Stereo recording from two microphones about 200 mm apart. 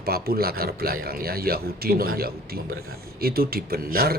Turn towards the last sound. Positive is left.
turn(degrees=-50)  # may be behind; listen again after turning